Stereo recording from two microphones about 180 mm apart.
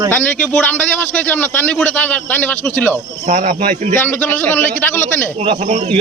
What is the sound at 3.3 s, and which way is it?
Speech, 45° right (ahead or behind).